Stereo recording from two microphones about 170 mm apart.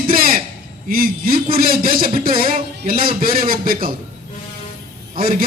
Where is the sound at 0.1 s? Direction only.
55° right (ahead or behind).